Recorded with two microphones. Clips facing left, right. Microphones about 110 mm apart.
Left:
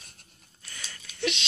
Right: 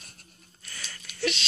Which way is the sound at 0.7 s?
20° left (ahead or behind).